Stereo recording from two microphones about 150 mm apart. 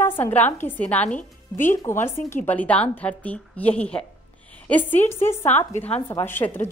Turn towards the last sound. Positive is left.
turn(degrees=15)  # may be behind; listen again after turning